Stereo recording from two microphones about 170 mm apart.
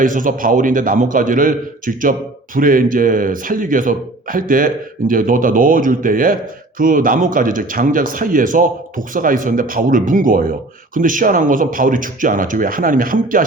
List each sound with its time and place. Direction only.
0.0 s a man's voice: 50° right (ahead or behind)